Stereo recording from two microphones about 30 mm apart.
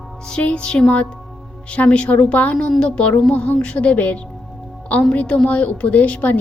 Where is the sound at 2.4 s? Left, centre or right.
Left.